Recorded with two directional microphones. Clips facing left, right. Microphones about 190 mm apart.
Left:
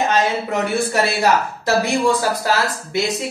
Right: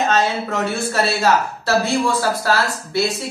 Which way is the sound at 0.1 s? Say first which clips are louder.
Even; 15° left (ahead or behind).